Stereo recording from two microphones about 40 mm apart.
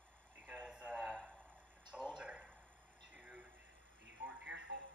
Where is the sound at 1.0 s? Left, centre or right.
Centre.